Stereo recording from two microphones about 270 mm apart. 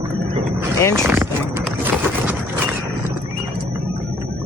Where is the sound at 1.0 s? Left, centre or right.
Centre.